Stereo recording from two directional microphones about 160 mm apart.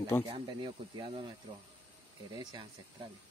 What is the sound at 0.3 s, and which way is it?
Speech, 30° right (ahead or behind).